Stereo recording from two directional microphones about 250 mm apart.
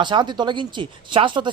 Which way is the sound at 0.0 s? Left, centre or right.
Centre.